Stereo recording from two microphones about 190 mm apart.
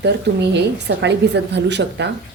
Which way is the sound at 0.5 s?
65° right (ahead or behind).